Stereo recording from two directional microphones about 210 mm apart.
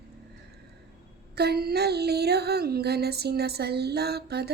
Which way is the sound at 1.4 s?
50° right (ahead or behind).